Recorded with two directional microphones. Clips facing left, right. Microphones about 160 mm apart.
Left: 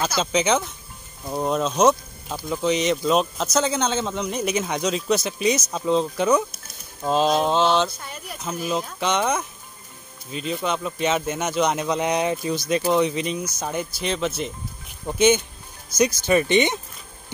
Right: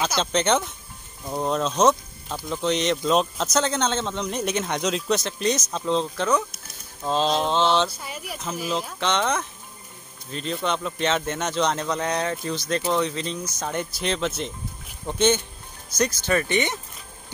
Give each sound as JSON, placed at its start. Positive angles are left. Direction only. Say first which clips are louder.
{"t": 0.0, "sound": "speech", "louder": "left 1 dB", "side_deg": 5}
{"t": 8.0, "sound": "speech", "louder": "right 1 dB", "side_deg": -5}